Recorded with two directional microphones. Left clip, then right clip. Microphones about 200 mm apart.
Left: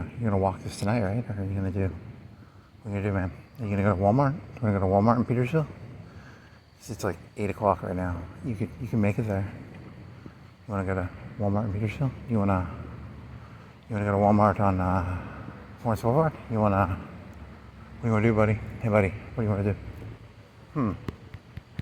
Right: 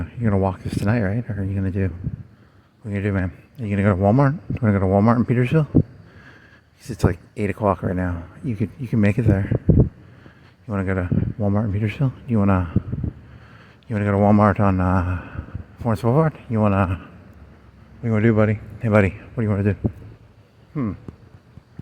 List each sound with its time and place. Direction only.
0.0 s speech: 60° right (ahead or behind)
6.8 s speech: 60° right (ahead or behind)
10.7 s speech: 60° right (ahead or behind)
13.9 s speech: 60° right (ahead or behind)
18.0 s a man's voice: 45° right (ahead or behind)